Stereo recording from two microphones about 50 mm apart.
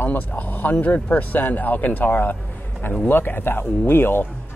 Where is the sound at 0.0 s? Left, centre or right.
Left.